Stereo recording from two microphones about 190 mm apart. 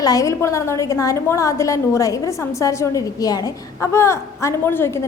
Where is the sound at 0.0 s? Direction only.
20° left (ahead or behind).